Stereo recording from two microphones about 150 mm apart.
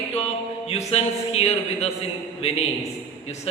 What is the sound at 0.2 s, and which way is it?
A man's voice, 45° left (ahead or behind).